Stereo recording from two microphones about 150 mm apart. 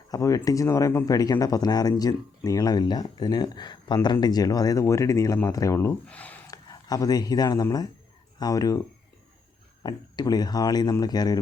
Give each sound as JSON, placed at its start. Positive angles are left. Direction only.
{"t": 0.1, "sound": "speech", "side_deg": 20}
{"t": 6.5, "sound": "speech", "side_deg": 25}
{"t": 9.8, "sound": "speech", "side_deg": 25}